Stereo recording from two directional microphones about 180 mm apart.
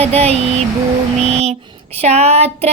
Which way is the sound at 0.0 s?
35° right (ahead or behind).